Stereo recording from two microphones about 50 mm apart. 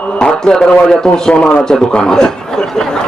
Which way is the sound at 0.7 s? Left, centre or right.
Centre.